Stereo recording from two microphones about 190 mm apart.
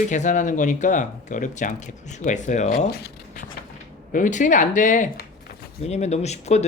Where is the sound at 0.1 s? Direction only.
40° left (ahead or behind).